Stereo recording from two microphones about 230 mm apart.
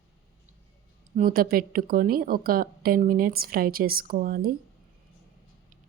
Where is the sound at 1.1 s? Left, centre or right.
Right.